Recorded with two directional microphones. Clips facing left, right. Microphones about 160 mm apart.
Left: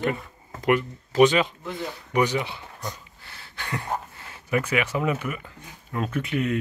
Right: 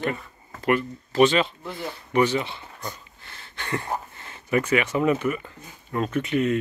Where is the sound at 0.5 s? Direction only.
15° left (ahead or behind).